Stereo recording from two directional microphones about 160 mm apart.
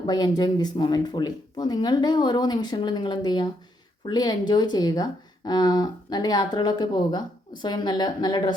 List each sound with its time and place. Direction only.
0.0 s speech: 25° left (ahead or behind)